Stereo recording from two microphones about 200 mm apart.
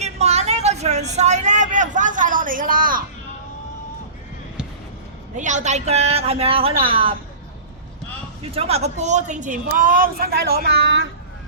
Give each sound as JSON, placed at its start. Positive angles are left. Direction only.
{"t": 0.0, "sound": "vehicle", "side_deg": -35}
{"t": 5.4, "sound": "speech", "side_deg": -35}
{"t": 8.5, "sound": "a woman's voice", "side_deg": -30}